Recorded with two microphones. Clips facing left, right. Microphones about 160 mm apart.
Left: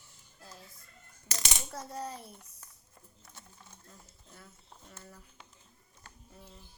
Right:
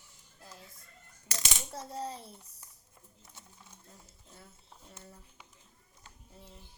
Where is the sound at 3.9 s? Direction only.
25° right (ahead or behind).